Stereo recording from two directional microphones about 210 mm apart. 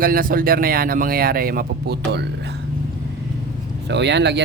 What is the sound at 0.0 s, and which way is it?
Speech, 45° right (ahead or behind).